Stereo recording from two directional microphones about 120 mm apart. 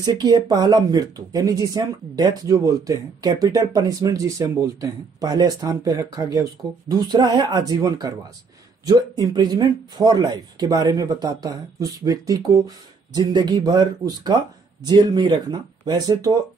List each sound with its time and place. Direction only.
0.0 s speech: 30° right (ahead or behind)